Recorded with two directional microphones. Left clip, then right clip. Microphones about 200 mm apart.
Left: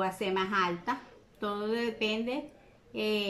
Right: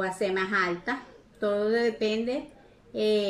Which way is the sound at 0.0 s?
15° left (ahead or behind).